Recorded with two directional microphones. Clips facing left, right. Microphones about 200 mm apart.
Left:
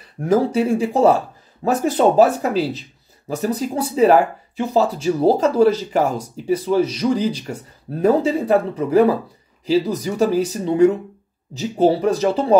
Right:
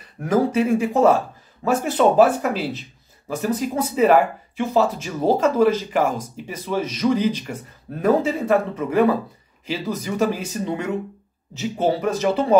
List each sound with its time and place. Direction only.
0.5 s speech: 30° left (ahead or behind)